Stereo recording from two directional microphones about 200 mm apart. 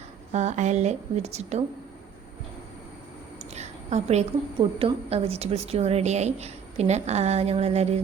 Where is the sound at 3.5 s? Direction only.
35° right (ahead or behind).